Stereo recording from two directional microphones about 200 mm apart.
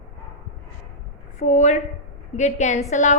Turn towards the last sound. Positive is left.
turn(degrees=35)  # may be behind; listen again after turning